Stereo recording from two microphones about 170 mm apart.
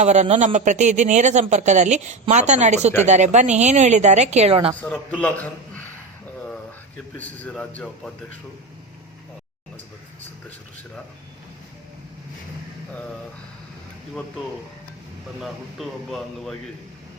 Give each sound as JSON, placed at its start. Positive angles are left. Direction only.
{"t": 0.0, "sound": "speech", "side_deg": -40}
{"t": 4.8, "sound": "a man's voice", "side_deg": 10}
{"t": 7.2, "sound": "a man's voice", "side_deg": 10}
{"t": 15.4, "sound": "a man's voice", "side_deg": 0}